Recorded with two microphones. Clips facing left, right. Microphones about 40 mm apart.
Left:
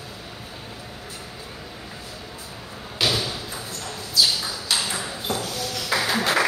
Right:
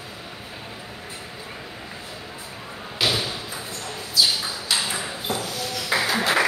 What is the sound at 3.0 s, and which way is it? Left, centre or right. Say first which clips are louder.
Thump: even; centre.